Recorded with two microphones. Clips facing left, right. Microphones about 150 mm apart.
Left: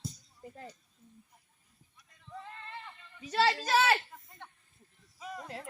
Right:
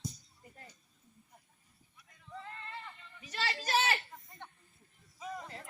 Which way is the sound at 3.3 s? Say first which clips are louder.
Left 6 dB; 90° left.